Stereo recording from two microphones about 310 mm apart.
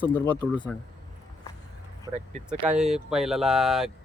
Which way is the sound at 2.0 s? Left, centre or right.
Right.